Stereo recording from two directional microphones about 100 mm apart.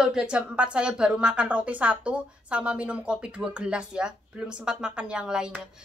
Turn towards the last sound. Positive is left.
turn(degrees=-10)  # may be behind; listen again after turning